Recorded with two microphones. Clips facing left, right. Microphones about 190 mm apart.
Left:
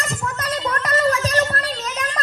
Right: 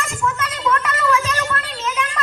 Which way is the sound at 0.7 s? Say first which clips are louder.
Right 1 dB; 35° left (ahead or behind).